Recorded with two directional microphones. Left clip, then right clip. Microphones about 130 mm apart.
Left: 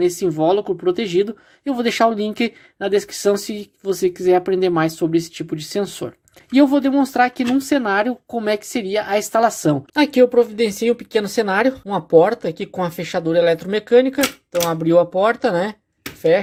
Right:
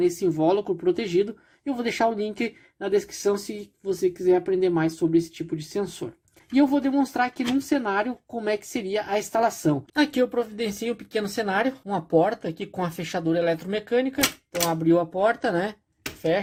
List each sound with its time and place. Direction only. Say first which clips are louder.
0.0 s speech: left 5 dB; 25° left (ahead or behind)